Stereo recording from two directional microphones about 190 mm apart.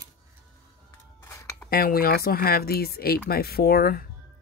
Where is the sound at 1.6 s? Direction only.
55° left (ahead or behind).